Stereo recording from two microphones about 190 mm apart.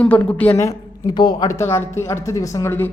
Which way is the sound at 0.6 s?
20° left (ahead or behind).